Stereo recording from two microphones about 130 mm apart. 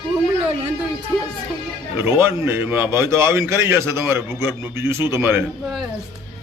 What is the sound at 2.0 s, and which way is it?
A man's voice, 15° right (ahead or behind).